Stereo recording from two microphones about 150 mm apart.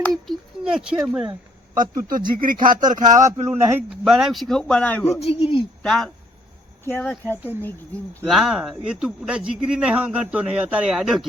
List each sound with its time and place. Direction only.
0.0 s speech: centre (ahead or behind)
2.0 s speech: 70° right (ahead or behind)
2.9 s speech: 55° right (ahead or behind)
3.4 s a man's voice: 20° right (ahead or behind)
3.8 s speech: 5° right (ahead or behind)
5.2 s speech: 40° left (ahead or behind)
5.8 s speech: 5° left (ahead or behind)